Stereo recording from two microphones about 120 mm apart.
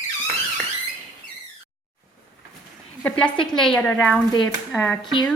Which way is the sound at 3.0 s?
10° left (ahead or behind).